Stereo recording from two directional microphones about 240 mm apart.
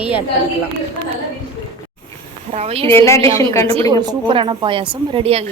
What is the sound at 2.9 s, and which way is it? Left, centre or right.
Speech, centre.